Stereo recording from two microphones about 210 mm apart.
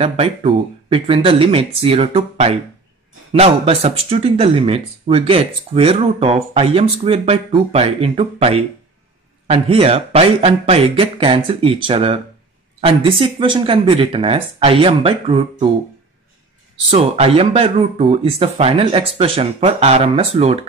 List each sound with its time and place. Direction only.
0.0 s speech: 30° right (ahead or behind)
16.9 s speech: 30° right (ahead or behind)